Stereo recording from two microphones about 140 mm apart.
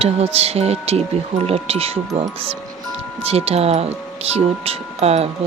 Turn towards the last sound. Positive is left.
turn(degrees=-45)  # may be behind; listen again after turning